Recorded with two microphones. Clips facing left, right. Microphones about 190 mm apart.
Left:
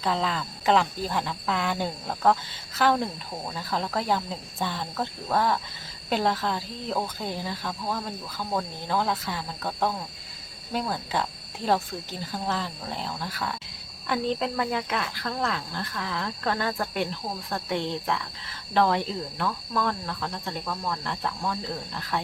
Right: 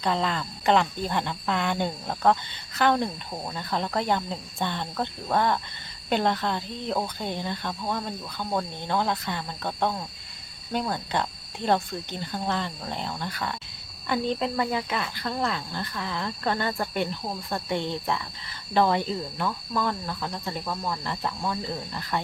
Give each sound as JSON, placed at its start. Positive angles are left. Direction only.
{"t": 0.0, "sound": "speech", "side_deg": 0}